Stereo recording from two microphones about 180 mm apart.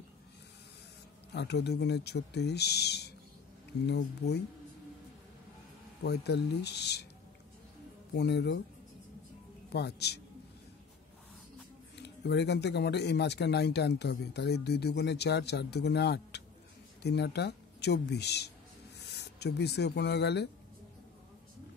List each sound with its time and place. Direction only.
1.3 s speech: 70° left (ahead or behind)
6.0 s speech: 65° left (ahead or behind)
8.1 s speech: 70° left (ahead or behind)
9.7 s speech: 65° left (ahead or behind)
12.0 s speech: 70° left (ahead or behind)